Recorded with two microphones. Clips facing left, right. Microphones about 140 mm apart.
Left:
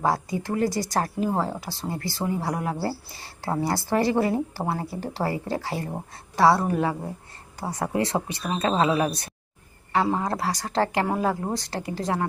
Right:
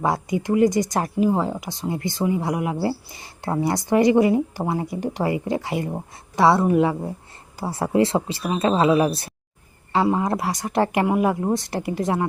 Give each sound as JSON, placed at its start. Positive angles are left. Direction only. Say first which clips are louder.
{"t": 0.0, "sound": "a woman's voice", "louder": "right 2 dB", "side_deg": -20}